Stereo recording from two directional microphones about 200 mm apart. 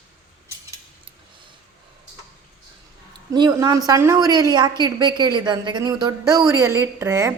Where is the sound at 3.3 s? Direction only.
20° right (ahead or behind).